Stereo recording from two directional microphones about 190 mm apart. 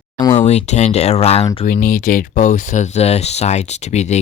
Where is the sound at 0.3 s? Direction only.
35° left (ahead or behind).